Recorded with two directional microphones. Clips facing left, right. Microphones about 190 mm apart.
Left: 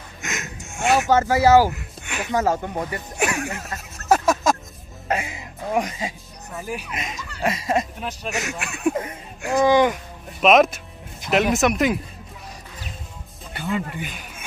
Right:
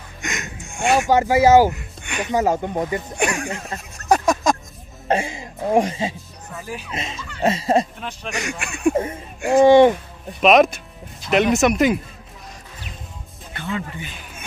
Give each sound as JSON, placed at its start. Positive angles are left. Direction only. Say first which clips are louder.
{"t": 0.2, "sound": "a sound", "louder": "right 2 dB", "side_deg": 0}
{"t": 1.0, "sound": "speech", "louder": "right 3 dB", "side_deg": -15}
{"t": 1.7, "sound": "music", "louder": "right 2 dB", "side_deg": 0}
{"t": 2.3, "sound": "speech", "louder": "right 2 dB", "side_deg": -15}
{"t": 3.2, "sound": "speech", "louder": "left 1 dB", "side_deg": 5}
{"t": 4.0, "sound": "a sound", "louder": "right 1 dB", "side_deg": 5}
{"t": 5.0, "sound": "a sound", "louder": "right 5 dB", "side_deg": -30}
{"t": 6.5, "sound": "speech", "louder": "left 2 dB", "side_deg": 10}
{"t": 6.9, "sound": "speech", "louder": "right 2 dB", "side_deg": -25}
{"t": 8.0, "sound": "speech", "louder": "left 1 dB", "side_deg": 5}
{"t": 9.7, "sound": "speech", "louder": "right 6 dB", "side_deg": -30}
{"t": 10.4, "sound": "speech", "louder": "right 1 dB", "side_deg": 0}
{"t": 13.7, "sound": "speech", "louder": "left 2 dB", "side_deg": 10}